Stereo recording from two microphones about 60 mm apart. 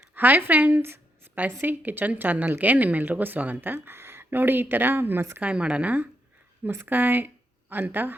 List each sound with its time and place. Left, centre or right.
0.1 s a woman's voice: right
5.4 s a woman's voice: right